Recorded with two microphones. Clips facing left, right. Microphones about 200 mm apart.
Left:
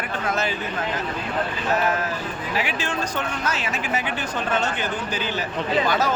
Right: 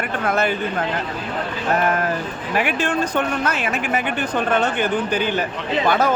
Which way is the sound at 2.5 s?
55° right (ahead or behind).